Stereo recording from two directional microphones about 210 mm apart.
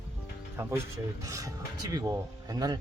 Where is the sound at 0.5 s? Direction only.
10° right (ahead or behind).